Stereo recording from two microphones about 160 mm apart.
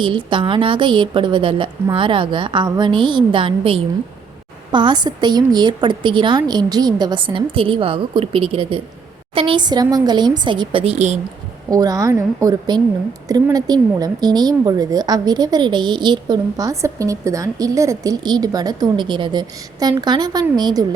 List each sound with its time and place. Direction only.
0.0 s a woman's voice: 30° right (ahead or behind)
11.7 s a woman's voice: 20° right (ahead or behind)